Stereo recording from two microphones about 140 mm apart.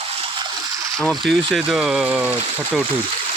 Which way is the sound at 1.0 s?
5° left (ahead or behind).